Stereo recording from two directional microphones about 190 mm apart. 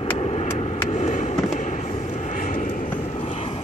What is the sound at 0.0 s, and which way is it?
Vehicle, 30° left (ahead or behind).